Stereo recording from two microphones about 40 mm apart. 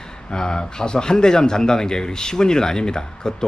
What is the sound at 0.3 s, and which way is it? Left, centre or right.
A man's voice, centre.